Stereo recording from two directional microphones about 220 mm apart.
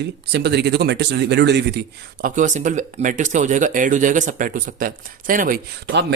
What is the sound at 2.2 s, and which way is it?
Speech, 35° right (ahead or behind).